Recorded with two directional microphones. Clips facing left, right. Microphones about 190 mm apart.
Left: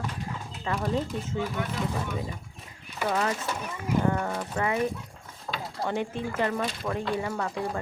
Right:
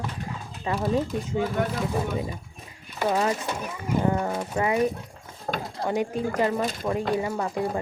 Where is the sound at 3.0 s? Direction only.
30° right (ahead or behind).